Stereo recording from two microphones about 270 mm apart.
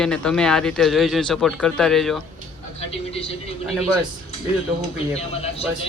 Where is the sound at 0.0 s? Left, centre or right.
Centre.